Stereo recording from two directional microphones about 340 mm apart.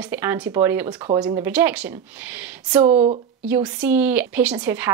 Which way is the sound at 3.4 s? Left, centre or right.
Centre.